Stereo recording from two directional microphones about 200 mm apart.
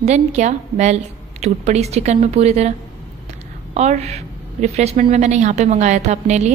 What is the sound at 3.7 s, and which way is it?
A woman's voice, 35° right (ahead or behind).